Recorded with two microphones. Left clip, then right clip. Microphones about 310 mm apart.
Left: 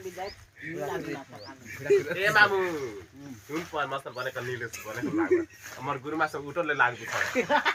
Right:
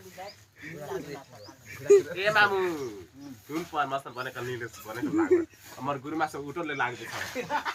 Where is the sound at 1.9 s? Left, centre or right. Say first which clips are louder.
Right 2 dB; centre.